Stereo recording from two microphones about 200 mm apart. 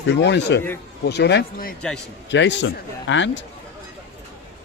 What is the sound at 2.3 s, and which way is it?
A man's voice, 60° left (ahead or behind).